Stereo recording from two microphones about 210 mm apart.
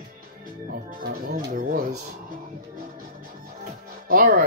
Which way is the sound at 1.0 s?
40° right (ahead or behind).